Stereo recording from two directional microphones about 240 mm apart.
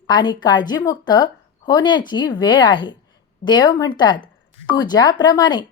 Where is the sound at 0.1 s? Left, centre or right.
Centre.